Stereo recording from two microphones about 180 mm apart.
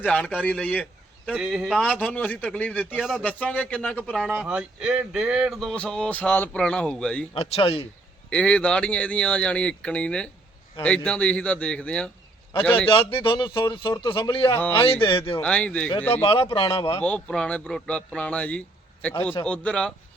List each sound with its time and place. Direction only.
0.0 s a man's voice: 5° left (ahead or behind)
1.3 s a man's voice: 5° right (ahead or behind)
4.4 s speech: 5° right (ahead or behind)
7.3 s speech: 35° left (ahead or behind)
8.3 s a man's voice: 5° left (ahead or behind)
12.9 s speech: 30° left (ahead or behind)
14.5 s a man's voice: 10° left (ahead or behind)
15.0 s speech: 30° left (ahead or behind)
15.4 s a man's voice: 5° left (ahead or behind)
16.2 s speech: 30° left (ahead or behind)
17.0 s a man's voice: 5° left (ahead or behind)